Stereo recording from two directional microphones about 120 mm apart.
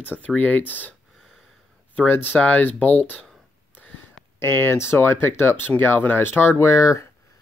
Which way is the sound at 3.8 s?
15° left (ahead or behind).